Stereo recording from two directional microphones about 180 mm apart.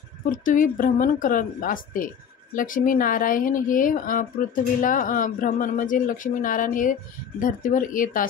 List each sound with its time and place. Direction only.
0.3 s speech: 45° left (ahead or behind)